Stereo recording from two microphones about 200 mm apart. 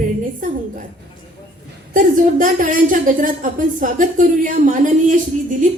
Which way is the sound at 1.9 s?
40° right (ahead or behind).